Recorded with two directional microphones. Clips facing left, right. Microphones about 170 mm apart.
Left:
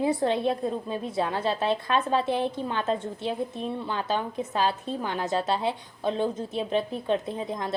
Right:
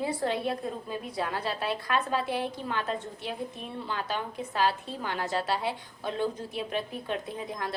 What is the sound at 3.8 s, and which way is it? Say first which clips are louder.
A woman's voice: left 2 dB; 20° left (ahead or behind).